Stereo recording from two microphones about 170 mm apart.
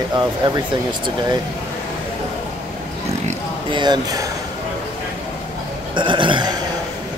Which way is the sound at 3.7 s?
25° right (ahead or behind).